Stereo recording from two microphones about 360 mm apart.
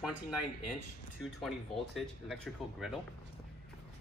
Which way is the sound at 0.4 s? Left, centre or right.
Left.